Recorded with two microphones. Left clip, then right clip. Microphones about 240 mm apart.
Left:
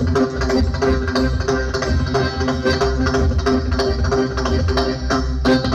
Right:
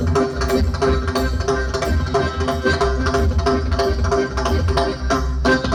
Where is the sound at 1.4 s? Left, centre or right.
Right.